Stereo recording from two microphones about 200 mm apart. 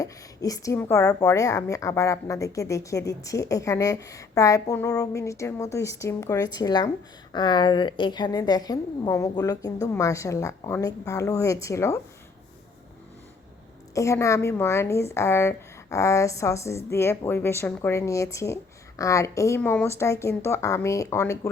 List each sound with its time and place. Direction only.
0.0 s a woman's voice: 15° left (ahead or behind)
13.9 s a woman's voice: 15° left (ahead or behind)